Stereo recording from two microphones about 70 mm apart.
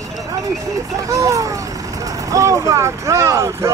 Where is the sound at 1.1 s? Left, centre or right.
Right.